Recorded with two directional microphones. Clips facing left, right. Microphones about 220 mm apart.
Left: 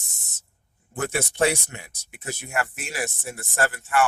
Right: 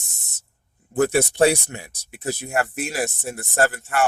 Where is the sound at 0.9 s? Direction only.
35° right (ahead or behind).